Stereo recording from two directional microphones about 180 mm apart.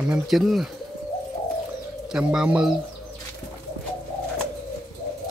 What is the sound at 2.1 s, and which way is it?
Speech, 5° right (ahead or behind).